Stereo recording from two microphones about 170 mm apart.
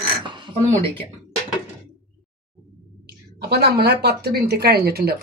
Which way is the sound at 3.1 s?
70° right (ahead or behind).